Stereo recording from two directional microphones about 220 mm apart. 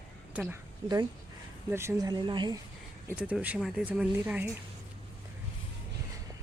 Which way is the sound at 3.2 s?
5° right (ahead or behind).